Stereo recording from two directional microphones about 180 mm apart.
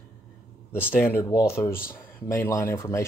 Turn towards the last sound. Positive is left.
turn(degrees=15)  # may be behind; listen again after turning